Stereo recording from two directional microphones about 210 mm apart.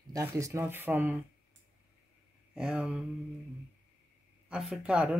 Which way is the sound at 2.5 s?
5° right (ahead or behind).